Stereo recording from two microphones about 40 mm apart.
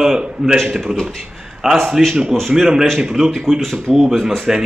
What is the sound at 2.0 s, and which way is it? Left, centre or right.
Speech, centre.